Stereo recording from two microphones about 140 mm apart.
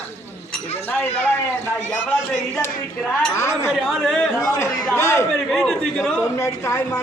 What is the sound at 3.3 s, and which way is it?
Speech, 20° left (ahead or behind).